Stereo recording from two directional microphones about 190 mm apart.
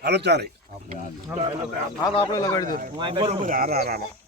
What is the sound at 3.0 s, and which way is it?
Speech, 25° right (ahead or behind).